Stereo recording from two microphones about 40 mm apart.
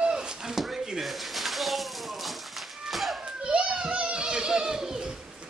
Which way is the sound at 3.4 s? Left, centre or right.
Right.